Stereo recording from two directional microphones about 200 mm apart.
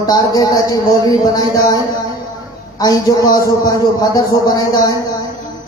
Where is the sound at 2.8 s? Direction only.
20° left (ahead or behind).